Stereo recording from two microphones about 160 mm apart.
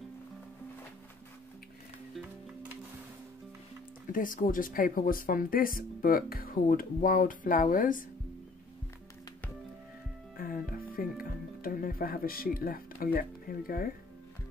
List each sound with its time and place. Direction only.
4.1 s speech: 55° left (ahead or behind)
10.3 s music: 65° left (ahead or behind)
11.6 s speech: 65° left (ahead or behind)